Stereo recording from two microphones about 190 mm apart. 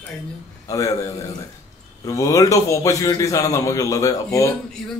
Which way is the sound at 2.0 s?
15° left (ahead or behind).